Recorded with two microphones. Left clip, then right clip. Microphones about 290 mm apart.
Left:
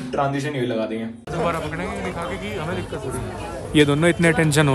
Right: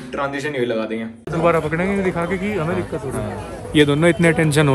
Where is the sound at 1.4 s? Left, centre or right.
Right.